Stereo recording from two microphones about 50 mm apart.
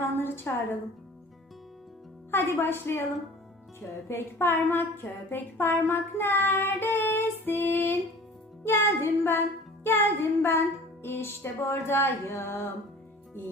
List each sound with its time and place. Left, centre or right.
0.2 s a woman's voice: left
2.3 s a woman's voice: left
4.1 s a woman's voice: left
6.5 s child singing: left
8.6 s a woman's voice: left